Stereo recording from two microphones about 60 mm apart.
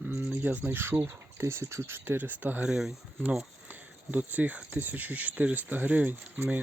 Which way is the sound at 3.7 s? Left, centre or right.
Right.